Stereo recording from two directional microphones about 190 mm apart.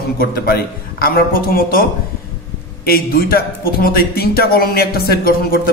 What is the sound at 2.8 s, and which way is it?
Speech, 50° left (ahead or behind).